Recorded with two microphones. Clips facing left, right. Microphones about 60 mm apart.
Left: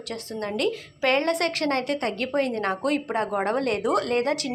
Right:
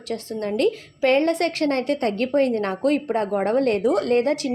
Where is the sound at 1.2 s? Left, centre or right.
Right.